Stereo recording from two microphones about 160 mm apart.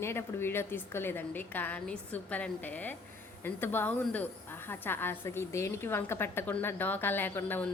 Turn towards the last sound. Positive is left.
turn(degrees=10)  # may be behind; listen again after turning